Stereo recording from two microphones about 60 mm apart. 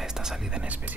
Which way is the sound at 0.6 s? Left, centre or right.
Right.